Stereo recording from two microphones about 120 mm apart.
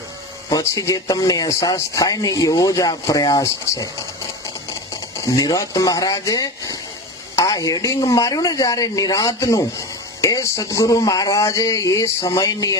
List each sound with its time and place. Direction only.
0.5 s speech: 30° left (ahead or behind)
5.2 s speech: 30° left (ahead or behind)